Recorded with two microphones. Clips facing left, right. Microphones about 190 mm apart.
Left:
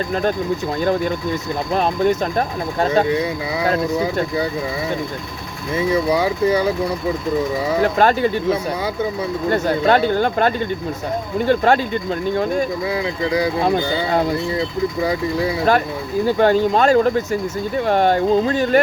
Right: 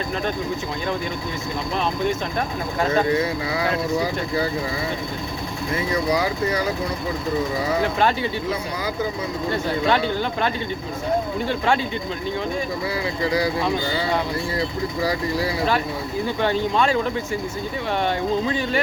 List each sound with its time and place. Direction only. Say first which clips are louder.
1.7 s speech: left 6 dB; 45° left (ahead or behind)
5.9 s speech: left 4 dB; 30° left (ahead or behind)
7.9 s speech: left 5 dB; 45° left (ahead or behind)
9.5 s speech: left 5 dB; 45° left (ahead or behind)
16.2 s speech: left 8 dB; 45° left (ahead or behind)